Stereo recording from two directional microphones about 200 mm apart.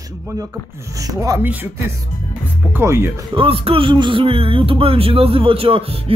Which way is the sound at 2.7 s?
10° right (ahead or behind).